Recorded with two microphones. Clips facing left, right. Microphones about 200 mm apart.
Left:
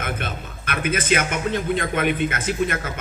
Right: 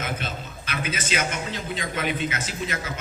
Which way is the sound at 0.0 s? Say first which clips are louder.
Left 2 dB; 55° left (ahead or behind).